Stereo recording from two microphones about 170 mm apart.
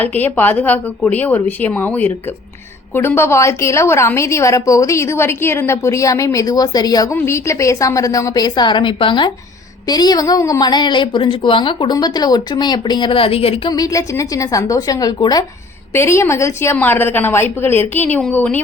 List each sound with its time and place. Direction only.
0.0 s a woman's voice: 10° left (ahead or behind); by 13.6 s 35° left (ahead or behind)
13.7 s a woman's voice: 20° left (ahead or behind)